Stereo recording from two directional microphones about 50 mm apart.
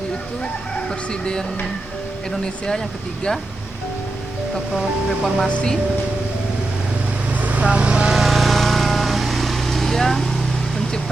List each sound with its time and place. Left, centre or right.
0.9 s speech: centre
4.7 s speech: centre
7.4 s vehicle: right
8.1 s vehicle: centre